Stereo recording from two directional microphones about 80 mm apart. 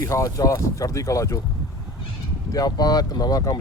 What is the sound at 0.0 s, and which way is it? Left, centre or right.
Speech, left.